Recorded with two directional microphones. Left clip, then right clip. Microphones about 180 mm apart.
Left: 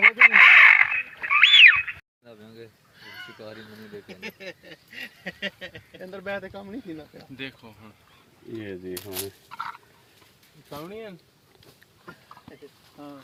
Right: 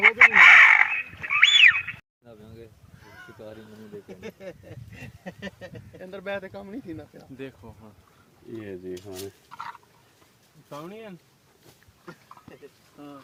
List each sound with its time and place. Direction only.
0.2 s chicken: 40° left (ahead or behind)
1.4 s a sound: 40° left (ahead or behind)
3.3 s speech: 15° left (ahead or behind)
4.1 s a sound: 30° right (ahead or behind)
6.0 s speech: 45° left (ahead or behind)
7.3 s speech: 45° right (ahead or behind)
8.5 s fowl: 35° left (ahead or behind)
10.7 s speech: 35° left (ahead or behind)